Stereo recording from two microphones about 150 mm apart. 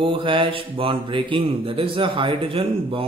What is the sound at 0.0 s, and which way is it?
Speech, 35° right (ahead or behind).